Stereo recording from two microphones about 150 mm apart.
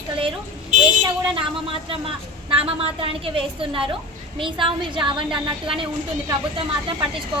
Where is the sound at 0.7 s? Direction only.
55° right (ahead or behind).